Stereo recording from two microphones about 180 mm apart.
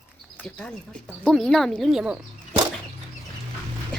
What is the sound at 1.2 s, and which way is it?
Speech, centre (ahead or behind).